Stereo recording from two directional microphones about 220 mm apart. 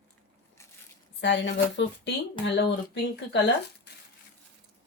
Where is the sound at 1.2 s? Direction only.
55° left (ahead or behind).